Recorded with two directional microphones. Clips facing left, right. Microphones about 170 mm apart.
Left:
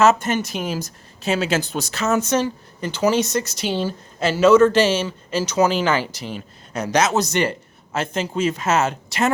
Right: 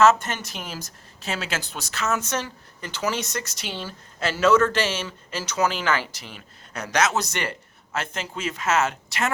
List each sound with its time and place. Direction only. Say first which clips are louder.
0.0 s a woman's voice: left 2 dB; 10° left (ahead or behind)
1.7 s speech: left 6 dB; 35° left (ahead or behind)